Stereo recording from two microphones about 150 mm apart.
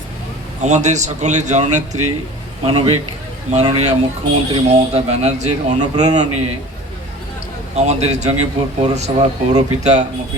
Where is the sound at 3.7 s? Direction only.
45° right (ahead or behind).